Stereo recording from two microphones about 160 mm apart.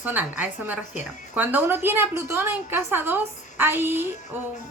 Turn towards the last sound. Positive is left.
turn(degrees=-15)  # may be behind; listen again after turning